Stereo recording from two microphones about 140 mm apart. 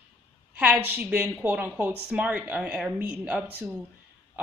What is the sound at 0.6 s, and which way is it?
Speech, 10° right (ahead or behind).